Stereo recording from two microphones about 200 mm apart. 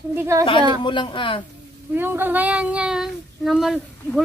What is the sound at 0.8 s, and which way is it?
Speech, 25° left (ahead or behind).